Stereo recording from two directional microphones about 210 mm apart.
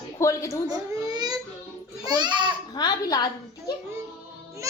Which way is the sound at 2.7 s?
20° left (ahead or behind).